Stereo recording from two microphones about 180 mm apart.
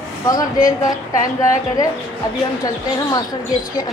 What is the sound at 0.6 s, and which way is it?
A woman's voice, 20° left (ahead or behind).